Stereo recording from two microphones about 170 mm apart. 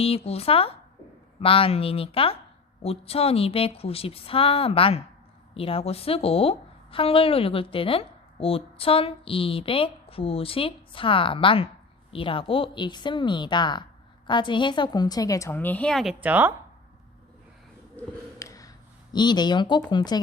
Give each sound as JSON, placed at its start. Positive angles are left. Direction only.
{"t": 0.0, "sound": "a woman's voice", "side_deg": 35}
{"t": 16.2, "sound": "speech", "side_deg": -10}
{"t": 17.9, "sound": "a sound", "side_deg": 20}
{"t": 19.1, "sound": "a woman's voice", "side_deg": 25}